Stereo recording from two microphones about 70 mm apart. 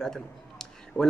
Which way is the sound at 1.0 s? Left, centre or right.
Left.